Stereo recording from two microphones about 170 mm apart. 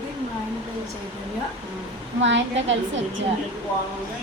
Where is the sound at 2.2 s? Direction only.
90° right.